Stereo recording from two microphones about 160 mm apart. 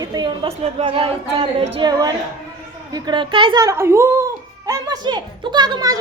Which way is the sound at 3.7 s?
15° right (ahead or behind).